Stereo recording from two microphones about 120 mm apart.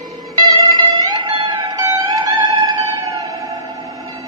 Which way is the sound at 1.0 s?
40° right (ahead or behind).